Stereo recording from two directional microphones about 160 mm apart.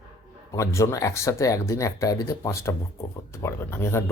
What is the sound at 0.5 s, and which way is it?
Speech, 20° left (ahead or behind).